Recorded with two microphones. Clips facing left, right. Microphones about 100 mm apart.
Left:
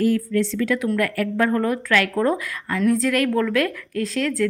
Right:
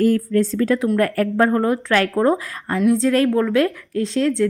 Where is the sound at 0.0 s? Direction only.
40° right (ahead or behind).